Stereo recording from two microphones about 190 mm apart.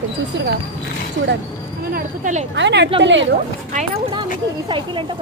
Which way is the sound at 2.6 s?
65° right (ahead or behind).